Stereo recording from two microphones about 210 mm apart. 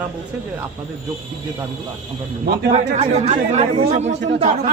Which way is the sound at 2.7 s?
30° right (ahead or behind).